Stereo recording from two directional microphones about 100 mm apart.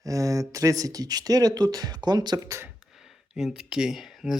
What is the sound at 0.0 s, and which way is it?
Speech, 35° right (ahead or behind).